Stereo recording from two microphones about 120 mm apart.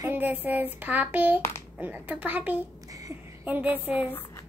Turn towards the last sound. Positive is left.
turn(degrees=-15)  # may be behind; listen again after turning